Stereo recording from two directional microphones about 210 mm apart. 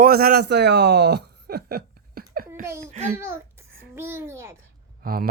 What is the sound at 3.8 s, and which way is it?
Speech, 10° right (ahead or behind).